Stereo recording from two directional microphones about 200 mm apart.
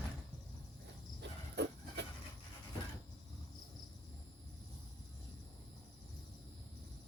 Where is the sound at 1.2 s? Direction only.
60° right (ahead or behind).